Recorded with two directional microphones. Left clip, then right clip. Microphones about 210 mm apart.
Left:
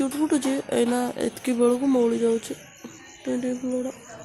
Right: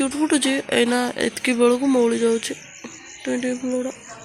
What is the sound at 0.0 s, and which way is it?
Speech, centre (ahead or behind).